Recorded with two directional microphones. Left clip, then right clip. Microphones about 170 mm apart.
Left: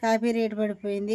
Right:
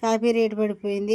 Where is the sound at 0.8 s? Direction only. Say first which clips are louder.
Right 3 dB; 40° left (ahead or behind).